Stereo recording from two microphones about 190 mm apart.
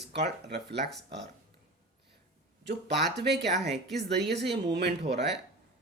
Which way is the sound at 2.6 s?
60° right (ahead or behind).